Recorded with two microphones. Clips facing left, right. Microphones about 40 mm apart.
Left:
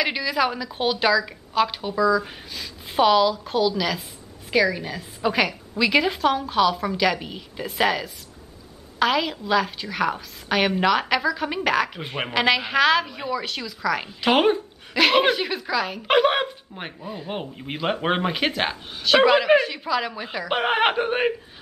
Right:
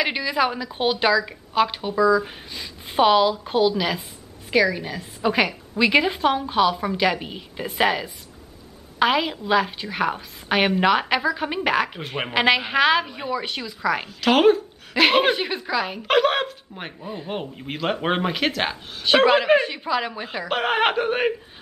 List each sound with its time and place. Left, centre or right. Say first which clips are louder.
0.0 s a woman's voice: right 1 dB; centre
4.5 s a woman's voice: right 1 dB; centre
12.0 s speech: right 1 dB; centre
12.4 s a woman's voice: right 1 dB; centre
14.0 s a woman's voice: right 3 dB; centre
15.0 s a woman's voice: right 1 dB; centre
16.1 s a woman's voice: even; centre
20.4 s speech: even; centre